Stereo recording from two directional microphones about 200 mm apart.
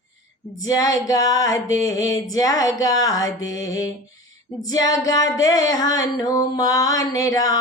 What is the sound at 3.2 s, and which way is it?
Music, 75° left (ahead or behind).